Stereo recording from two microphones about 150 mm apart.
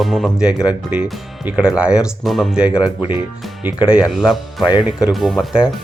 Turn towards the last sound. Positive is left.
turn(degrees=-5)  # may be behind; listen again after turning